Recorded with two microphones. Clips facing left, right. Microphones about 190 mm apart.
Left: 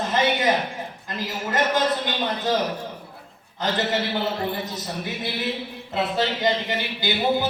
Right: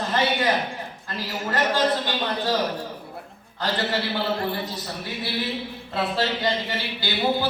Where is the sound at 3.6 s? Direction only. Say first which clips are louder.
Left 1 dB; 20° left (ahead or behind).